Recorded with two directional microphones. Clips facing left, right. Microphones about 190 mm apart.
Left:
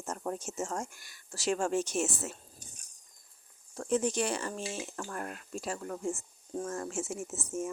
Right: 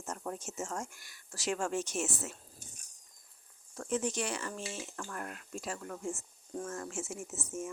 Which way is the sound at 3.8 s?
35° left (ahead or behind).